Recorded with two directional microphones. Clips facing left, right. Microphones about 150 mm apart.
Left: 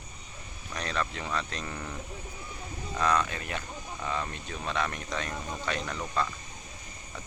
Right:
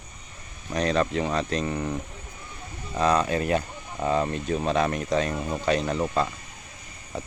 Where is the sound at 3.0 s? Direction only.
30° right (ahead or behind).